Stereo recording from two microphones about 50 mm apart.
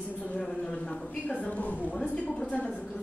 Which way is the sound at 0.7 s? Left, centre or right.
Left.